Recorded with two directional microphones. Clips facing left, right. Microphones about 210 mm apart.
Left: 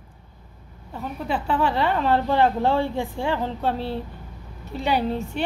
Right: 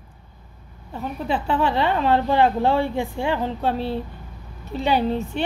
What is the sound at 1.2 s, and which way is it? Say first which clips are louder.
A woman's voice: right 1 dB; 25° right (ahead or behind).